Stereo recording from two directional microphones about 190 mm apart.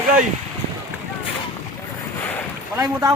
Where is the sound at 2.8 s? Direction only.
15° right (ahead or behind).